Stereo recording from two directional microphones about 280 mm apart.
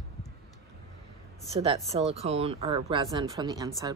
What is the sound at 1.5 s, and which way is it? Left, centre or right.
Speech, right.